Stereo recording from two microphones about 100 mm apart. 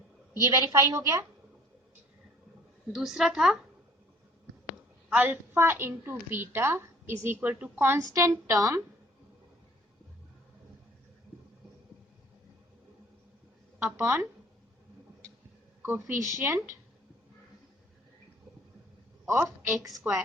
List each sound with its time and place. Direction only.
0.4 s a woman's voice: 30° right (ahead or behind)
2.9 s a woman's voice: 5° right (ahead or behind)
5.0 s a woman's voice: 20° right (ahead or behind)
8.1 s a woman's voice: 30° right (ahead or behind)
13.7 s a woman's voice: 25° right (ahead or behind)
15.8 s a woman's voice: 20° right (ahead or behind)
20.1 s a woman's voice: 20° right (ahead or behind)